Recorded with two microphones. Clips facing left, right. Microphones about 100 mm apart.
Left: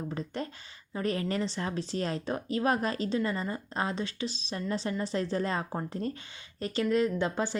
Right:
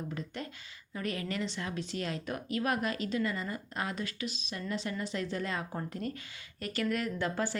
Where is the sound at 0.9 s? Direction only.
30° left (ahead or behind).